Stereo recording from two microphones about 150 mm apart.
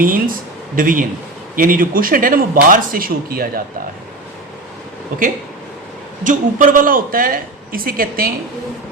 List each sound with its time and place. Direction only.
0.0 s speech: 70° right (ahead or behind)
6.2 s speech: 65° right (ahead or behind)